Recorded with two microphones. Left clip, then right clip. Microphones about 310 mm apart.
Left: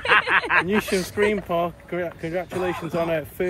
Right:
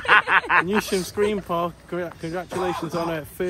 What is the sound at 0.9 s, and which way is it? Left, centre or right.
Speech, centre.